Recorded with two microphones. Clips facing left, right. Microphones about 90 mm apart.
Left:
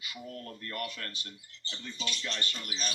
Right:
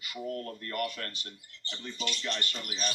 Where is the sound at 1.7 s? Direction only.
35° right (ahead or behind).